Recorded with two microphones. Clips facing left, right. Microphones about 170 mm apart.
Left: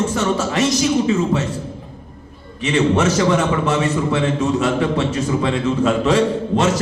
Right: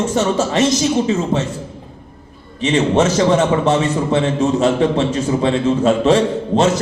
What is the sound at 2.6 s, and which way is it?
A man's voice, 30° right (ahead or behind).